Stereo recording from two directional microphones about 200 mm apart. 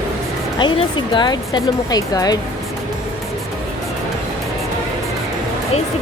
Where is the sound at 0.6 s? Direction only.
25° left (ahead or behind).